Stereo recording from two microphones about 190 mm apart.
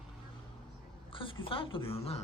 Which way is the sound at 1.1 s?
25° left (ahead or behind).